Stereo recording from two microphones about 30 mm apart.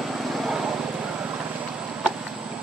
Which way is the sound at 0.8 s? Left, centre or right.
Right.